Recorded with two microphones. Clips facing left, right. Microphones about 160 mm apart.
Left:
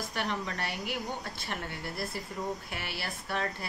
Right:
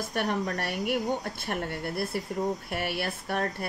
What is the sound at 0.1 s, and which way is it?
A woman's voice, 50° right (ahead or behind).